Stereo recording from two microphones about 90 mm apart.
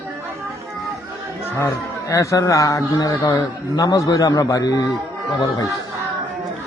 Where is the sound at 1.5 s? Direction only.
35° left (ahead or behind).